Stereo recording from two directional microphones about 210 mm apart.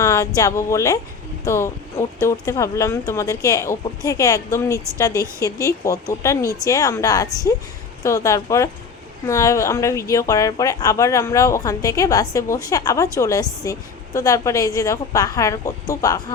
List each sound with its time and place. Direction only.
0.0 s a woman's voice: 15° left (ahead or behind)